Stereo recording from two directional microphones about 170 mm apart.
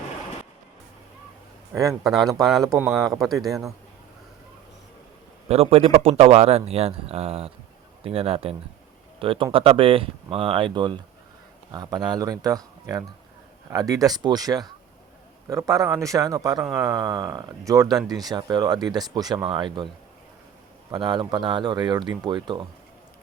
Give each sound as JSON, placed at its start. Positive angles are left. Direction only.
{"t": 1.7, "sound": "speech", "side_deg": -20}
{"t": 2.0, "sound": "speech", "side_deg": 0}
{"t": 3.5, "sound": "speech", "side_deg": -20}
{"t": 5.5, "sound": "speech", "side_deg": -35}
{"t": 20.9, "sound": "speech", "side_deg": -25}